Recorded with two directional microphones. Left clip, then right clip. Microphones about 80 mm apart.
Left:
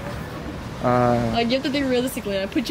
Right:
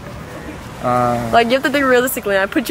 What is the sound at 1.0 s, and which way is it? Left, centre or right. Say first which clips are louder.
Speech: right 3 dB; right.